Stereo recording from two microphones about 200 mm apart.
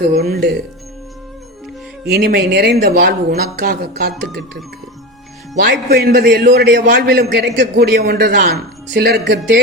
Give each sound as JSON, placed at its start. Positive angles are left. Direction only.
{"t": 0.0, "sound": "a man's voice", "side_deg": -50}
{"t": 2.0, "sound": "a man's voice", "side_deg": -55}
{"t": 5.5, "sound": "a man's voice", "side_deg": -50}